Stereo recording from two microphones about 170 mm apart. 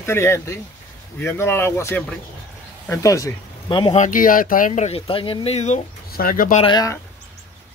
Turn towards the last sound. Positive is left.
turn(degrees=25)  # may be behind; listen again after turning